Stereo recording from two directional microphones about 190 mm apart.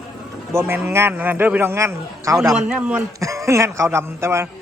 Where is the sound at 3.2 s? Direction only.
15° right (ahead or behind).